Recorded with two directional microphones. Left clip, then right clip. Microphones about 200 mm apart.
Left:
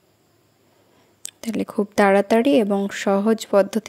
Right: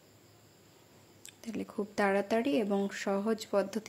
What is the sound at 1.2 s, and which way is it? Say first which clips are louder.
Speech: left 14 dB; 45° left (ahead or behind).